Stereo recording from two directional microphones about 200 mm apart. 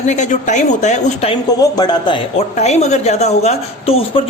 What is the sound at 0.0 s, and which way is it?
Speech, 35° left (ahead or behind).